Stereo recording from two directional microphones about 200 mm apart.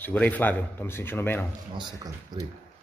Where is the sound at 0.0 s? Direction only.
10° left (ahead or behind).